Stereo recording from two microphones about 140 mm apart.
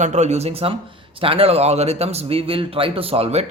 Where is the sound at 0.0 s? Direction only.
55° right (ahead or behind).